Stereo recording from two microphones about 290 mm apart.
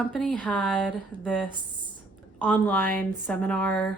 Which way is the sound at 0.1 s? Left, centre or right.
Centre.